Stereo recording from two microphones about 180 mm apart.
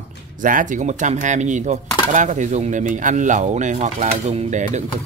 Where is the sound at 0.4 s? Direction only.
45° right (ahead or behind).